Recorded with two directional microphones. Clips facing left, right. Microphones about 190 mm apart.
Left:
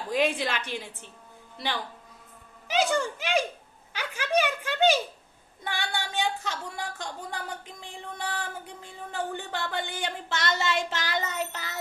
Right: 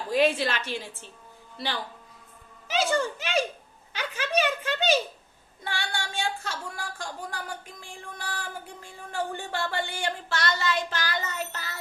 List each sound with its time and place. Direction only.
0.1 s a woman's voice: 15° left (ahead or behind)
3.9 s a sound: 15° left (ahead or behind)
5.6 s speech: 15° left (ahead or behind)